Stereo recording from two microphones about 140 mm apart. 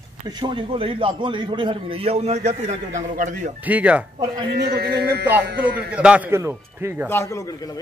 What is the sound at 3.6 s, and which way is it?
Speech, 10° right (ahead or behind).